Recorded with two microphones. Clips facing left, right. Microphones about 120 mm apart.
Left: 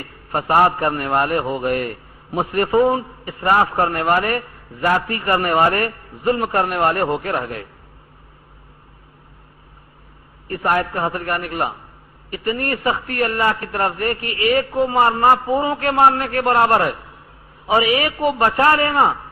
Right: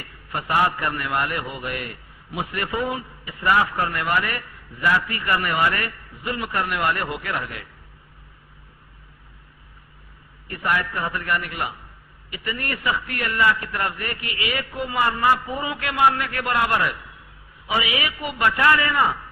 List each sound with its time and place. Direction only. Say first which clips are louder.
0.0 s a man's voice: left 7 dB; 45° left (ahead or behind)
10.5 s a man's voice: left 5 dB; 45° left (ahead or behind)